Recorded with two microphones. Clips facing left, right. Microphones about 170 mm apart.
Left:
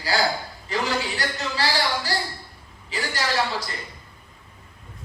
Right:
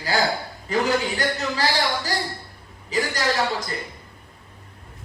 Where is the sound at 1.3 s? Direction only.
40° right (ahead or behind).